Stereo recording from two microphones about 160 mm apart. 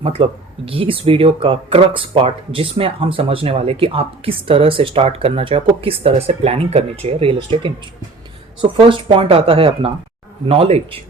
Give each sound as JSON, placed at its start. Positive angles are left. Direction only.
{"t": 0.0, "sound": "speech", "side_deg": -35}